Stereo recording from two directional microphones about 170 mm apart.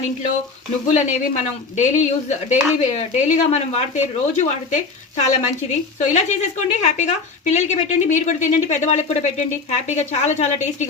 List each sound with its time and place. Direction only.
0.9 s speech: 45° left (ahead or behind)